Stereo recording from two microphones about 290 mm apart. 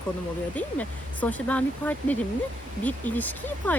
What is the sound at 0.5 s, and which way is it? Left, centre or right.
Speech, centre.